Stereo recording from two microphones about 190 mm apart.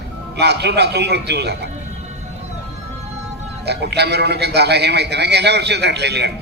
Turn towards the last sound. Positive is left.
turn(degrees=-60)  # may be behind; listen again after turning